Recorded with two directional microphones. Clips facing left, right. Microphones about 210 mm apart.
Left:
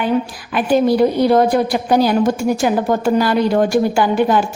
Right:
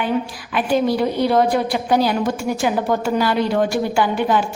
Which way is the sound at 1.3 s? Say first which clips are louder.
Left 4 dB; 45° left (ahead or behind).